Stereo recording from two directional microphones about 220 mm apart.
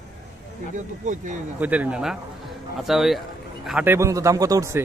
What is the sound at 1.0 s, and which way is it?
Speech, 35° right (ahead or behind).